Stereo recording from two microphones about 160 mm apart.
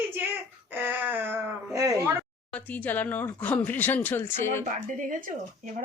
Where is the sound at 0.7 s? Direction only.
10° right (ahead or behind).